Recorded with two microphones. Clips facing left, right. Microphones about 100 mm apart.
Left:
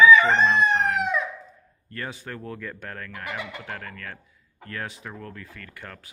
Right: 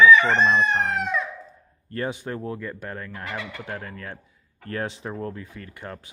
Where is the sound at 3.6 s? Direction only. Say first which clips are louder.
Right 2 dB; 20° right (ahead or behind).